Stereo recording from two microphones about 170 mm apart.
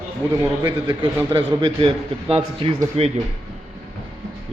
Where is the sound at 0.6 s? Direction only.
25° right (ahead or behind).